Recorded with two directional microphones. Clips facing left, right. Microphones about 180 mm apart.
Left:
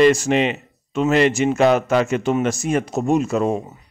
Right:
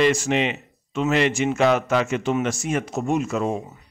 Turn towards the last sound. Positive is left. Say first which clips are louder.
# left 4 dB
turn(degrees=40)  # may be behind; listen again after turning